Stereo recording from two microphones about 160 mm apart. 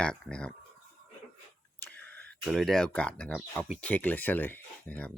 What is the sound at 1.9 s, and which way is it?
Speech, 10° left (ahead or behind).